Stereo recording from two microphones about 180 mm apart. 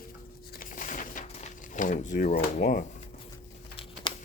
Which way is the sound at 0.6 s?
50° left (ahead or behind).